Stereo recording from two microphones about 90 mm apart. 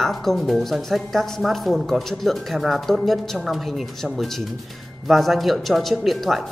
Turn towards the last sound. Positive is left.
turn(degrees=0)  # may be behind; listen again after turning